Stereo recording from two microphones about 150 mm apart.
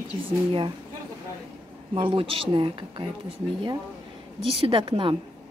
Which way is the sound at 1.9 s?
35° right (ahead or behind).